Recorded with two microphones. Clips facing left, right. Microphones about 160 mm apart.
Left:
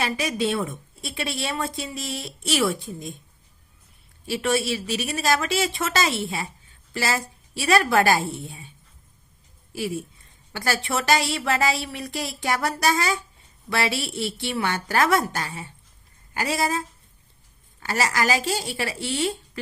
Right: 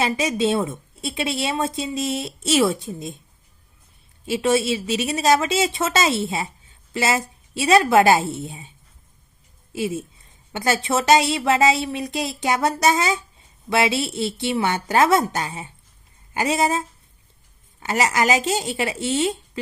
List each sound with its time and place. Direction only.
0.0 s a woman's voice: 20° right (ahead or behind)
4.3 s a woman's voice: 20° right (ahead or behind)
9.7 s a woman's voice: 20° right (ahead or behind)
17.7 s a woman's voice: 20° right (ahead or behind)